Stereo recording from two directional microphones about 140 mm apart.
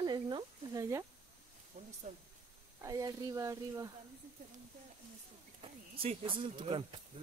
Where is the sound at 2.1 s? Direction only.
55° right (ahead or behind).